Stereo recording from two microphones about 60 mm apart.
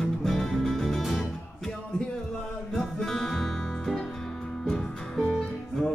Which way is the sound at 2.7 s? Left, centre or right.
Centre.